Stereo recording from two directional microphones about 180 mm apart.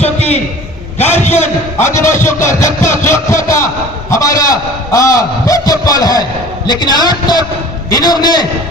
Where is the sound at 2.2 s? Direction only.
15° left (ahead or behind).